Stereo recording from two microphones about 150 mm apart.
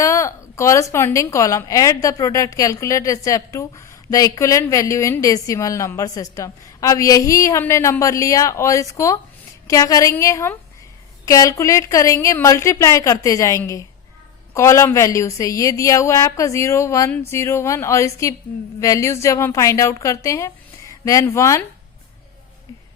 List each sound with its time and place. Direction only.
0.0 s a woman's voice: 20° left (ahead or behind)